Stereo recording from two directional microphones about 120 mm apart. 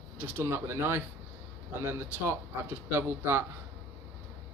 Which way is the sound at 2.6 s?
20° right (ahead or behind).